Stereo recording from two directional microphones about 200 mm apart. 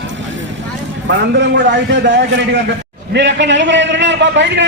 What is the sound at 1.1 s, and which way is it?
A man's voice, 60° right (ahead or behind).